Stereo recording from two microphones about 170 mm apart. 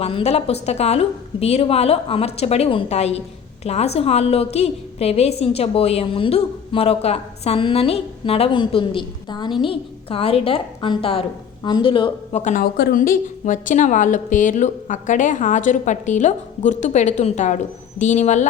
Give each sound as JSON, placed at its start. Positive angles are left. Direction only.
{"t": 0.0, "sound": "a woman's voice", "side_deg": 40}
{"t": 12.4, "sound": "a woman's voice", "side_deg": 45}
{"t": 12.7, "sound": "a woman's voice", "side_deg": 75}
{"t": 13.0, "sound": "a woman's voice", "side_deg": 50}